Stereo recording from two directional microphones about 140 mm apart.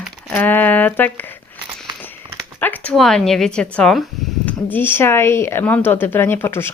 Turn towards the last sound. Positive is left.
turn(degrees=15)  # may be behind; listen again after turning